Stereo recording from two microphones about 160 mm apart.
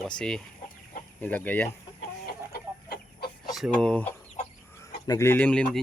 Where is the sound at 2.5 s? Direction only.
75° left (ahead or behind).